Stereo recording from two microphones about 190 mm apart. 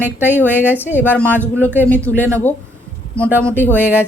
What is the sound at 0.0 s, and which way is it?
Speech, 10° right (ahead or behind).